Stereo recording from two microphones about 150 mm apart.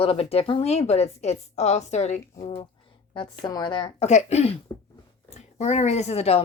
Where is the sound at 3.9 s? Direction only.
45° left (ahead or behind).